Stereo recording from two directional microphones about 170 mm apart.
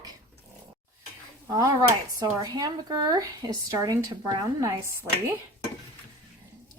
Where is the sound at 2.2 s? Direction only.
25° right (ahead or behind).